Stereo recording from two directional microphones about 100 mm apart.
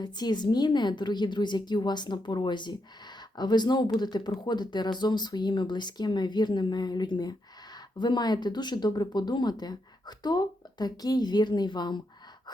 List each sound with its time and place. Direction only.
0.0 s speech: 45° left (ahead or behind)